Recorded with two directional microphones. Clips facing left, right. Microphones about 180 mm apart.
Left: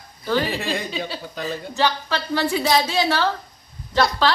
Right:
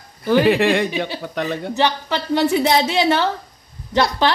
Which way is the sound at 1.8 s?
20° right (ahead or behind).